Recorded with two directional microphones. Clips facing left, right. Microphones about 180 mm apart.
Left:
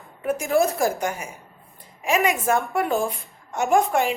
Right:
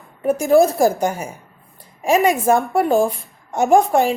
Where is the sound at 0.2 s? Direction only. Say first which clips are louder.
Right 7 dB; 35° right (ahead or behind).